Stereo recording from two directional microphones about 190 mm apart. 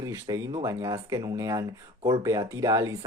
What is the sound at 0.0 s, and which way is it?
Speech, 15° right (ahead or behind).